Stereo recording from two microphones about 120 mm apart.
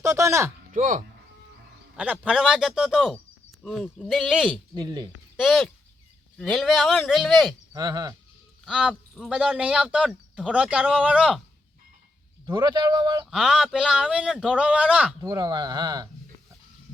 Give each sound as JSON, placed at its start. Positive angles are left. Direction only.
{"t": 0.0, "sound": "speech", "side_deg": -25}
{"t": 0.7, "sound": "speech", "side_deg": -90}
{"t": 2.2, "sound": "speech", "side_deg": -5}
{"t": 4.1, "sound": "speech", "side_deg": -5}
{"t": 4.7, "sound": "speech", "side_deg": -35}
{"t": 5.4, "sound": "speech", "side_deg": -5}
{"t": 7.7, "sound": "speech", "side_deg": -35}
{"t": 8.6, "sound": "speech", "side_deg": -5}
{"t": 12.5, "sound": "speech", "side_deg": -35}
{"t": 13.3, "sound": "speech", "side_deg": -5}
{"t": 15.2, "sound": "speech", "side_deg": -30}